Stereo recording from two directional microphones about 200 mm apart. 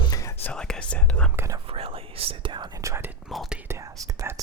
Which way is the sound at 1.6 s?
30° right (ahead or behind).